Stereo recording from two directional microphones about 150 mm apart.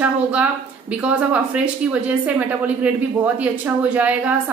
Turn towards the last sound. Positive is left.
turn(degrees=-10)  # may be behind; listen again after turning